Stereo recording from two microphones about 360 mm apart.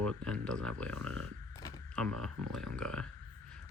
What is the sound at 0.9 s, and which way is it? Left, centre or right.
Speech, right.